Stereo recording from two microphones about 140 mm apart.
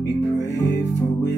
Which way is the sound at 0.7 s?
20° left (ahead or behind).